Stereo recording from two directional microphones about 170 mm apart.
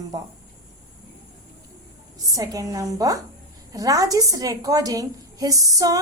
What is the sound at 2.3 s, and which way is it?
A woman's voice, 20° right (ahead or behind).